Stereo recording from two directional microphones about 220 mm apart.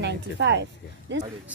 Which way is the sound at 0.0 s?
50° right (ahead or behind).